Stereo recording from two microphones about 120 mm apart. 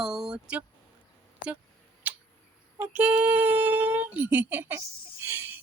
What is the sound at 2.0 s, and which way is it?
Tick, 15° right (ahead or behind).